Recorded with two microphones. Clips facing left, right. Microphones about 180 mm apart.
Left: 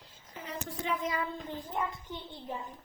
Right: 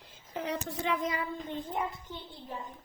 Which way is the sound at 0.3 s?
75° right (ahead or behind).